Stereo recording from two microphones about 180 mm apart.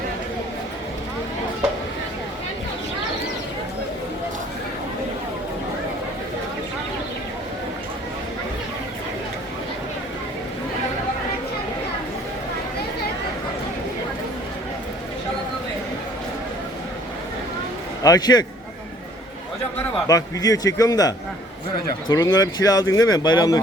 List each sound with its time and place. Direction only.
18.0 s a man's voice: 20° left (ahead or behind)
20.1 s speech: 20° left (ahead or behind)
22.1 s speech: 20° left (ahead or behind)